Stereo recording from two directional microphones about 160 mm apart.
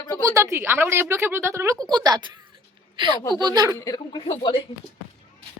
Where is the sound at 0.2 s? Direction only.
20° right (ahead or behind).